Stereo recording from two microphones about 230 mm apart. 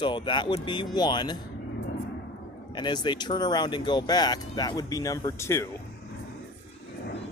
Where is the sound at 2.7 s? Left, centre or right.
Centre.